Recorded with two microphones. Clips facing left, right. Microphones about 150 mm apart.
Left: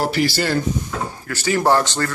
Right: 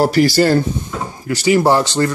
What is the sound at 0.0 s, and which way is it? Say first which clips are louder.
Speech: right 7 dB; 40° right (ahead or behind).